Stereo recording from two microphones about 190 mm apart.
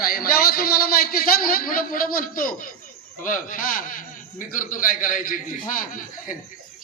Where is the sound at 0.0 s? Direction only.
50° left (ahead or behind).